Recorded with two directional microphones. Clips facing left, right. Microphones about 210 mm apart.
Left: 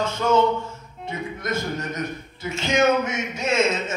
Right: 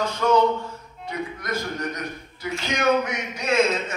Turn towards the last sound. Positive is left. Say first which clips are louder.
# even
turn(degrees=25)  # may be behind; listen again after turning